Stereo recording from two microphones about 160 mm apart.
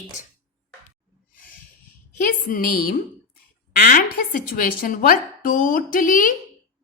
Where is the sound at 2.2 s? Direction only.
60° left (ahead or behind).